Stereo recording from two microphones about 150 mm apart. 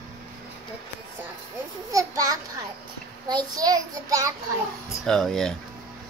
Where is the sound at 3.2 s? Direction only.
25° right (ahead or behind).